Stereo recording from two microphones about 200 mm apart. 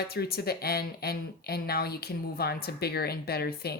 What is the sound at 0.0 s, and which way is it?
Speech, 50° left (ahead or behind).